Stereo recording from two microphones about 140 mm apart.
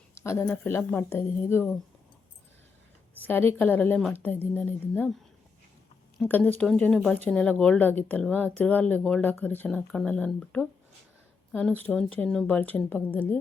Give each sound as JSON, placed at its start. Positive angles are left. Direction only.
{"t": 0.1, "sound": "a sound", "side_deg": 20}
{"t": 0.4, "sound": "a woman's voice", "side_deg": 15}
{"t": 3.2, "sound": "a woman's voice", "side_deg": 15}
{"t": 6.2, "sound": "a woman's voice", "side_deg": 10}